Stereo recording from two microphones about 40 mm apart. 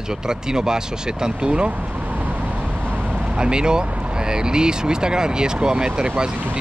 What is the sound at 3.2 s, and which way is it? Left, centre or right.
Speech, right.